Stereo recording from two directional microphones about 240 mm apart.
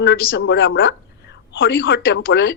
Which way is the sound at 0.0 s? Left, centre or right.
Left.